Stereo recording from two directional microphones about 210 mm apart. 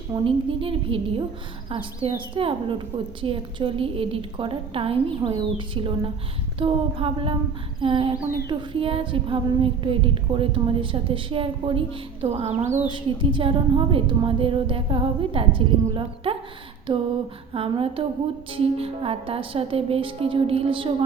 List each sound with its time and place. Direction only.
0.1 s child singing: 25° right (ahead or behind)
17.5 s child singing: 25° right (ahead or behind)